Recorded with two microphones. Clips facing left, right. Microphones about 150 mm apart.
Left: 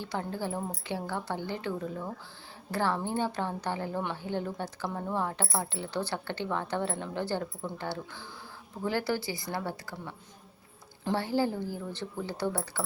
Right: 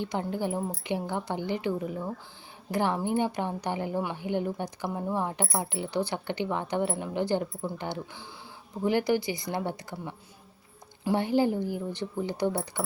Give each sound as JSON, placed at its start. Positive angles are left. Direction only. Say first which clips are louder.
{"t": 0.0, "sound": "a woman's voice", "louder": "right 4 dB", "side_deg": -20}